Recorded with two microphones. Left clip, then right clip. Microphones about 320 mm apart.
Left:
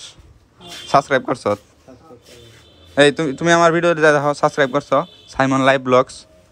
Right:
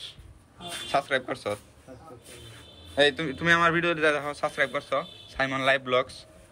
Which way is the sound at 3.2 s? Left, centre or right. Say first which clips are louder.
Left 8 dB; centre.